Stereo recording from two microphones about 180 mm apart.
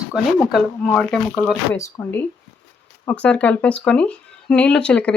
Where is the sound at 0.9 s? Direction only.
Centre (ahead or behind).